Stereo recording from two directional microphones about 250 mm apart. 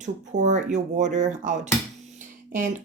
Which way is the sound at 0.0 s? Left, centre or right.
Right.